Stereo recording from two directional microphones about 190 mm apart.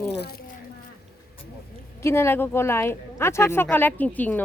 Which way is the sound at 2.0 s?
15° left (ahead or behind).